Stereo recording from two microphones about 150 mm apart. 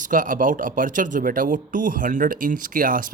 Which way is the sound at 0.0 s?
65° right (ahead or behind).